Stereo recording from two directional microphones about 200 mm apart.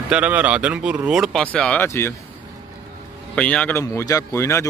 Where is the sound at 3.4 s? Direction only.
5° left (ahead or behind).